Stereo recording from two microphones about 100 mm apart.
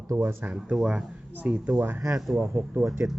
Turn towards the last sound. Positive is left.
turn(degrees=-15)  # may be behind; listen again after turning